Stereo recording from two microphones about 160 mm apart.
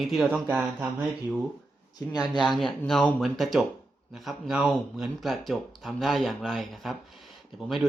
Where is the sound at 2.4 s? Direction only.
Centre (ahead or behind).